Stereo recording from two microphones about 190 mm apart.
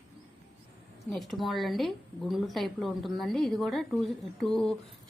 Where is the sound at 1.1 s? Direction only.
Centre (ahead or behind).